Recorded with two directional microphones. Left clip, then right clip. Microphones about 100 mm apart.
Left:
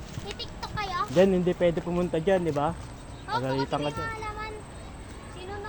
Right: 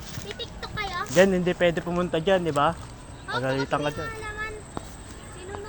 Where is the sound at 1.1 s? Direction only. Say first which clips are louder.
Right 3 dB; 15° left (ahead or behind).